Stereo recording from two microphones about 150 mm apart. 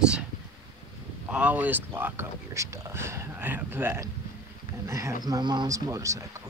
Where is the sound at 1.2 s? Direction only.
10° right (ahead or behind).